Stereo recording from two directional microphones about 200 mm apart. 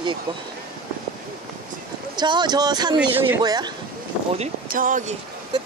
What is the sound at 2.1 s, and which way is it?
Speech, 20° right (ahead or behind).